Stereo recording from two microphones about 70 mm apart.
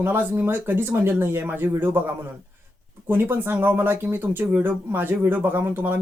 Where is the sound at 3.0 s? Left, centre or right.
Right.